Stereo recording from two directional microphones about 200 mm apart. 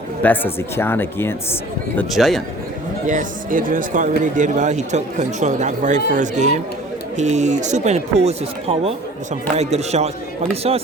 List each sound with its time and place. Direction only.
0.2 s speech: 10° left (ahead or behind)
2.0 s a man's voice: centre (ahead or behind)
3.1 s speech: 40° right (ahead or behind)